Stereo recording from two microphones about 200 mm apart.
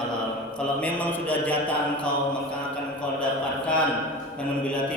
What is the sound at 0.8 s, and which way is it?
Speech, 5° left (ahead or behind).